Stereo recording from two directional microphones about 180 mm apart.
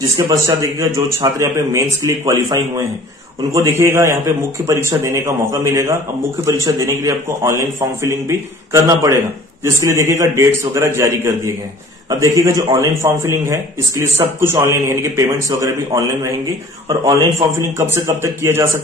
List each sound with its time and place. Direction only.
0.3 s a man's voice: 20° right (ahead or behind)